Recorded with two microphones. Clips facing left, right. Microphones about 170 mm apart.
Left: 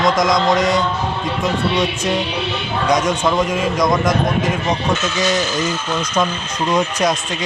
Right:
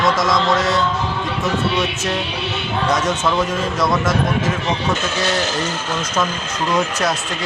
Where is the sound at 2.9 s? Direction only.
15° left (ahead or behind).